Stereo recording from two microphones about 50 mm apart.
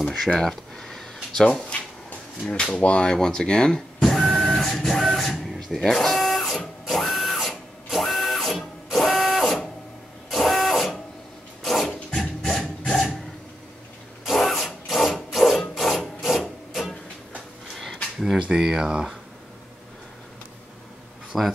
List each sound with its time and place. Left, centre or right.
0.2 s speech: centre
0.7 s a sound: centre
1.4 s a sound: left
2.7 s speech: left
4.3 s vehicle: centre
4.7 s printer: centre
6.9 s a sound: centre
8.9 s printer: centre
11.6 s filing: centre
12.2 s music: centre
14.3 s a sound: centre
15.1 s rub: centre
18.4 s speech: centre
21.3 s speech: centre